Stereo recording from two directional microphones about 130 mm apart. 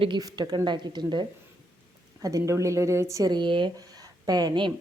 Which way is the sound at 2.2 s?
25° right (ahead or behind).